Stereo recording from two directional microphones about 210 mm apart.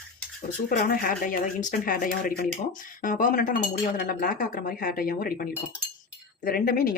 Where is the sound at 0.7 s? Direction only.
45° left (ahead or behind).